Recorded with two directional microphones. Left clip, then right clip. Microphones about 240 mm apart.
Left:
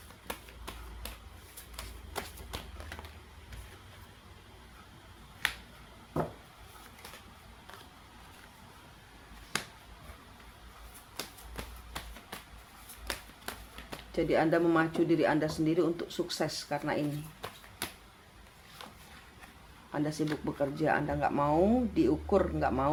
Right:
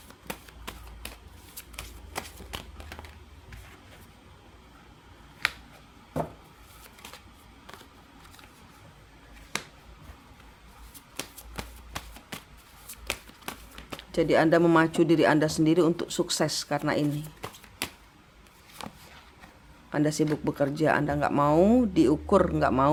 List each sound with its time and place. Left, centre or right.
2.1 s a sound: right
14.1 s speech: right
19.9 s speech: right